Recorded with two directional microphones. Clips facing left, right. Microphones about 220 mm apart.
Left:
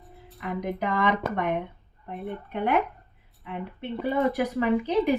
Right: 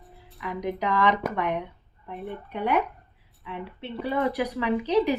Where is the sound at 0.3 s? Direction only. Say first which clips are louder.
Even; 50° left (ahead or behind).